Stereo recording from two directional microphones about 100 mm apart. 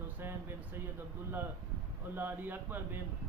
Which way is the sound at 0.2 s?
20° right (ahead or behind).